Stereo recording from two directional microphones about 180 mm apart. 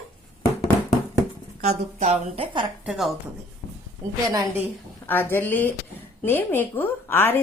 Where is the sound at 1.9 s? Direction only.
40° right (ahead or behind).